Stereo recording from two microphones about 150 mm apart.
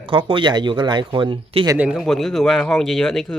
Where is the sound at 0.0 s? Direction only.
35° right (ahead or behind).